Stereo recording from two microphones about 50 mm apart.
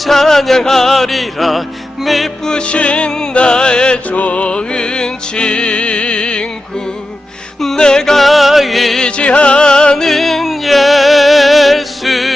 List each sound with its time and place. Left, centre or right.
0.0 s music: centre
2.4 s music: centre
7.6 s music: centre
9.0 s music: left; by 12.3 s centre